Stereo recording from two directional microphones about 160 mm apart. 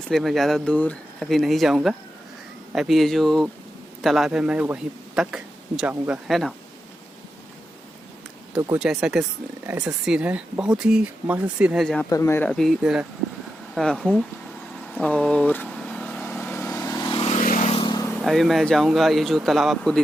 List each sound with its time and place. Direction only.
0.1 s a man's voice: centre (ahead or behind)
8.7 s speech: 5° right (ahead or behind)
12.0 s speech: 20° left (ahead or behind)
12.5 s speech: centre (ahead or behind)
15.0 s vehicle: 5° left (ahead or behind)
17.1 s vehicle: 35° left (ahead or behind)
17.3 s vehicle: 55° left (ahead or behind)
17.7 s vehicle: 25° left (ahead or behind)
18.1 s speech: centre (ahead or behind)